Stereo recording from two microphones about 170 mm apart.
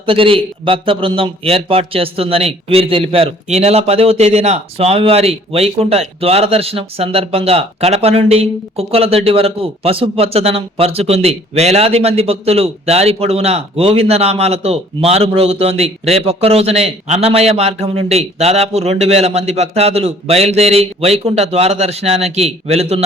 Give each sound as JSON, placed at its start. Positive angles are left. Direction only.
{"t": 0.0, "sound": "a man's voice", "side_deg": -30}